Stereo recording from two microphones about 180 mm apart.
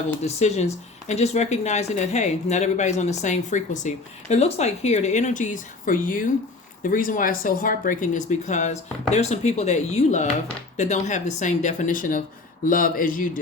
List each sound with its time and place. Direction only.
0.2 s speech: 35° left (ahead or behind)